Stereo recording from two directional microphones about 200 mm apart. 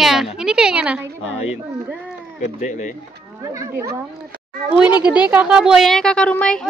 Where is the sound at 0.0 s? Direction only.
Centre (ahead or behind).